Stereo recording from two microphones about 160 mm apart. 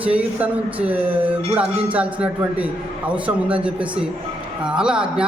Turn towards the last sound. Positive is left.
turn(degrees=-5)  # may be behind; listen again after turning